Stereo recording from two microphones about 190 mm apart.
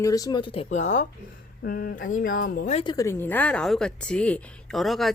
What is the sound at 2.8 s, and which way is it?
Speech, 20° left (ahead or behind).